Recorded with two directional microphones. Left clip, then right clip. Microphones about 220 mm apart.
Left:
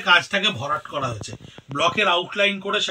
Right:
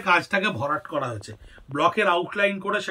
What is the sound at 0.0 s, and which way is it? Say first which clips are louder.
A man's voice: left 3 dB; 15° right (ahead or behind).